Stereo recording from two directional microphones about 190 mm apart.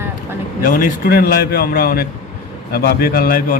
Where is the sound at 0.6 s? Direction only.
45° left (ahead or behind).